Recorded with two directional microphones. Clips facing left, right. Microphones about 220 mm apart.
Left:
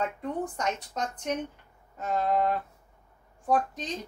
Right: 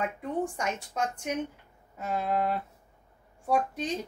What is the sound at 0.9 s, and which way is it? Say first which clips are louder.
Speech: even; 10° right (ahead or behind).